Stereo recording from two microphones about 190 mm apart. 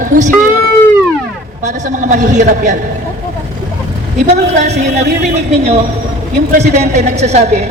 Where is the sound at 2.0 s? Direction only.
40° right (ahead or behind).